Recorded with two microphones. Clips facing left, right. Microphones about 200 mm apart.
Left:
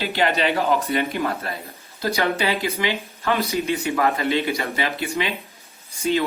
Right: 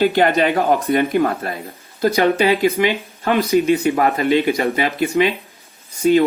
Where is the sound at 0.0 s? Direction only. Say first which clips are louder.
Right 7 dB; 50° right (ahead or behind).